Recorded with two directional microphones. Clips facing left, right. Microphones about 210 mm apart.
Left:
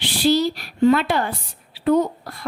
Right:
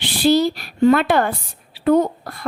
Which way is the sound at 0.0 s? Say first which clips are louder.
Right 3 dB; 55° right (ahead or behind).